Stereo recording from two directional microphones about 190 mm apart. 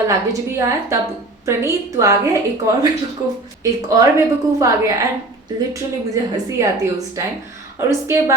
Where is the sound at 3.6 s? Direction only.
20° right (ahead or behind).